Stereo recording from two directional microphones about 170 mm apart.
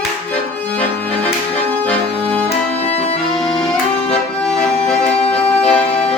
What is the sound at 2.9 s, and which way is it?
Accordion, 35° left (ahead or behind).